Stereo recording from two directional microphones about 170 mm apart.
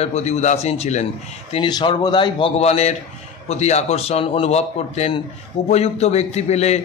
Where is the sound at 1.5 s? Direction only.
30° left (ahead or behind).